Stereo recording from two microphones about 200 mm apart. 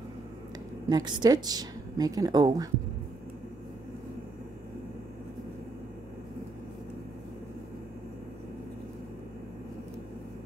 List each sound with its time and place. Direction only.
0.8 s a woman's voice: 20° right (ahead or behind)